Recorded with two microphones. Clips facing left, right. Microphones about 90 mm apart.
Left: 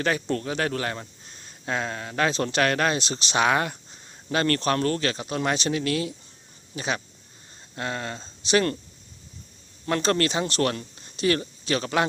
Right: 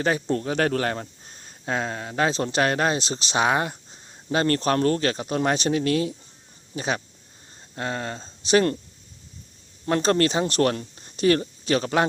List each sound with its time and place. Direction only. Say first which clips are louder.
0.0 s speech: right 2 dB; 25° right (ahead or behind)
0.5 s speech: right 4 dB; 40° right (ahead or behind)
9.8 s speech: right 3 dB; 30° right (ahead or behind)